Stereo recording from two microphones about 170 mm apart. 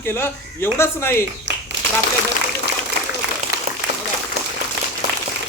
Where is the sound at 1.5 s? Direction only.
90° right.